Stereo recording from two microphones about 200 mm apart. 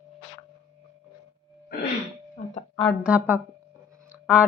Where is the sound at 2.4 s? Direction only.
40° left (ahead or behind).